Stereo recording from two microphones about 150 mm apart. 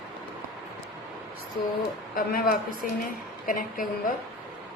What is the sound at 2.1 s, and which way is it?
Speech, 75° left (ahead or behind).